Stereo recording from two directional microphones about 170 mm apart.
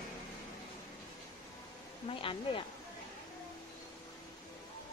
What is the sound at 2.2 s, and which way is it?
Speech, 30° left (ahead or behind).